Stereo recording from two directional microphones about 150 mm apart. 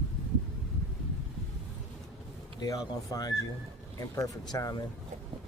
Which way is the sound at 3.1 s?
25° left (ahead or behind).